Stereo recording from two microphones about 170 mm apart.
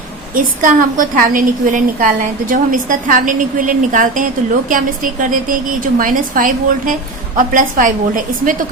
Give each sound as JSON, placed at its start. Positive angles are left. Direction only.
{"t": 0.3, "sound": "a woman's voice", "side_deg": -50}